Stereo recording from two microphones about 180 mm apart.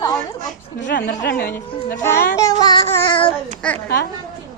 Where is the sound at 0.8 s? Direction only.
55° left (ahead or behind).